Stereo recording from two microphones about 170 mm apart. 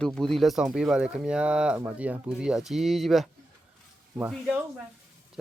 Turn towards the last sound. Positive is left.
turn(degrees=-10)  # may be behind; listen again after turning